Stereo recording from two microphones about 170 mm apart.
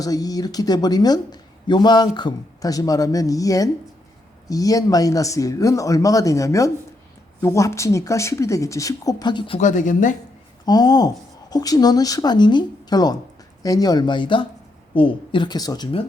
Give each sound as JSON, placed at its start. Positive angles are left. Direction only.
{"t": 0.0, "sound": "speech", "side_deg": 20}
{"t": 9.6, "sound": "speech", "side_deg": 45}
{"t": 10.7, "sound": "speech", "side_deg": 25}